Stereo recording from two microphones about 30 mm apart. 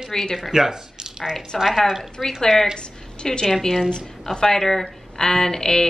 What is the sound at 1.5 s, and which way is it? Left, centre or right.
A woman's voice, centre.